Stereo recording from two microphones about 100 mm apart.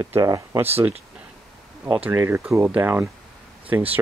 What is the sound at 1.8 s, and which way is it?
Speech, 15° right (ahead or behind).